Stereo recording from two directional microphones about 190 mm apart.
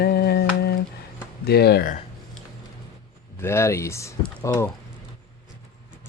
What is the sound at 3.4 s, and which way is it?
Speech, 15° left (ahead or behind).